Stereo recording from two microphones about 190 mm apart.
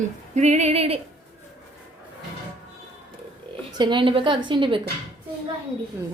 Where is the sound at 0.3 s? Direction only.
35° right (ahead or behind).